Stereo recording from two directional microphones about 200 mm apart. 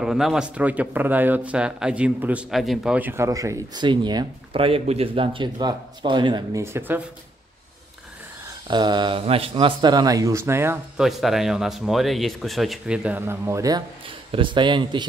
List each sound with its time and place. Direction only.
0.0 s speech: centre (ahead or behind)
8.6 s a man's voice: 20° right (ahead or behind)
11.1 s a man's voice: centre (ahead or behind); by 15.0 s 25° right (ahead or behind)